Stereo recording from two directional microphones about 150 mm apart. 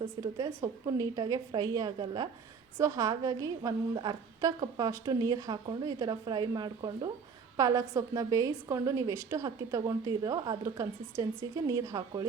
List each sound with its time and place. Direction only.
0.2 s a woman's voice: 25° right (ahead or behind)